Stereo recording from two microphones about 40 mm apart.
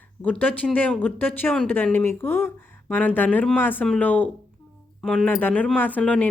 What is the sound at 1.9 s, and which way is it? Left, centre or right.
Speech, left.